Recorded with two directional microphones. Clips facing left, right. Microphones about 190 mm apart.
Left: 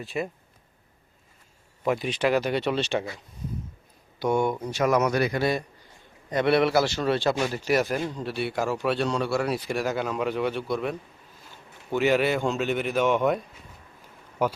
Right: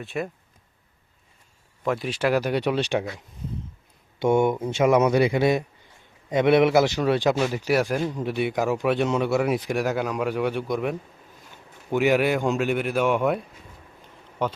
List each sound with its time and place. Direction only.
0.0 s speech: centre (ahead or behind)
1.8 s speech: 5° left (ahead or behind)
2.0 s a man's voice: 5° right (ahead or behind)
4.2 s a man's voice: 25° right (ahead or behind); by 13.4 s 5° right (ahead or behind)
14.4 s speech: 10° left (ahead or behind)